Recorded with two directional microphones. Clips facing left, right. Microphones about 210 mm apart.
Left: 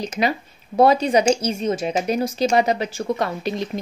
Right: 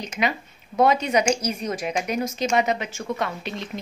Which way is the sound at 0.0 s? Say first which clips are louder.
Left 4 dB; 35° left (ahead or behind).